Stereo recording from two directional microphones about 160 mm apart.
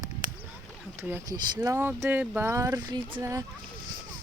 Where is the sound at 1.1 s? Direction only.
25° right (ahead or behind).